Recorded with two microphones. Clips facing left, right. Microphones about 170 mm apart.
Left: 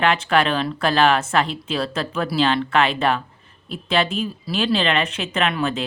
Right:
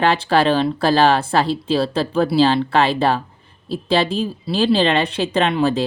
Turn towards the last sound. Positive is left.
turn(degrees=-35)  # may be behind; listen again after turning